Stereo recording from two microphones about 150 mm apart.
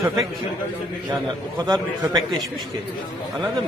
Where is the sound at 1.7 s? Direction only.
25° right (ahead or behind).